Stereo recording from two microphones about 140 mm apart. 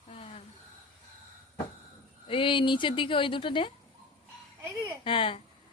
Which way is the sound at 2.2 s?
40° left (ahead or behind).